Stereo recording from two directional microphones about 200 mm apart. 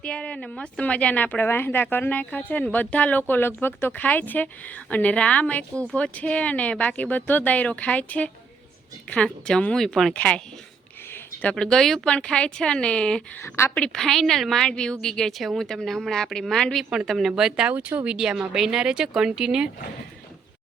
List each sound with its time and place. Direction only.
0.0 s a woman's voice: 5° left (ahead or behind)